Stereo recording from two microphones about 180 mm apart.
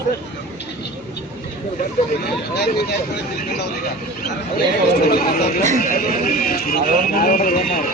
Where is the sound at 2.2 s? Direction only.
60° left (ahead or behind).